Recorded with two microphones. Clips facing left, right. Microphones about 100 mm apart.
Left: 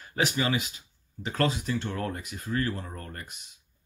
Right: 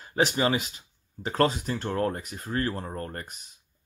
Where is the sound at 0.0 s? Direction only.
30° right (ahead or behind).